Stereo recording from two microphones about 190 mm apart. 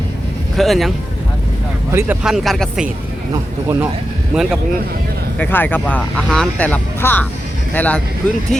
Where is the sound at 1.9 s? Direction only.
15° right (ahead or behind).